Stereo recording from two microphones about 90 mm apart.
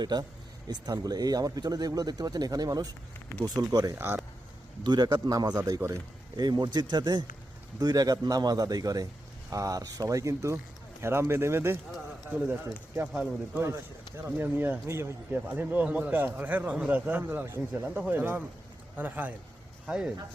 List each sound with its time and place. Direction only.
0.0 s speech: 50° right (ahead or behind)
3.9 s a man's voice: 25° right (ahead or behind)
4.8 s a man's voice: 55° right (ahead or behind); by 19.3 s 20° right (ahead or behind)
19.9 s speech: 10° right (ahead or behind)